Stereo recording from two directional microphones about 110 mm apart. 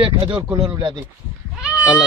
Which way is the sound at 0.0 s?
50° right (ahead or behind).